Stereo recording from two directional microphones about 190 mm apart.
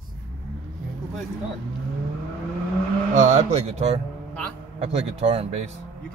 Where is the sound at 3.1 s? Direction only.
35° right (ahead or behind).